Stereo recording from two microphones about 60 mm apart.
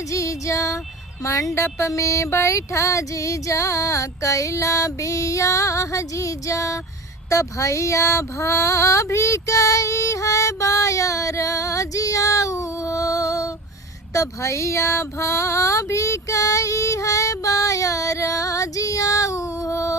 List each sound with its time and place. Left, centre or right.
0.1 s female singing: left
1.2 s a sound: left
7.3 s female singing: left